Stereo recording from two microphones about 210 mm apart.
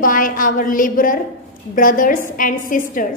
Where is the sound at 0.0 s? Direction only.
40° left (ahead or behind).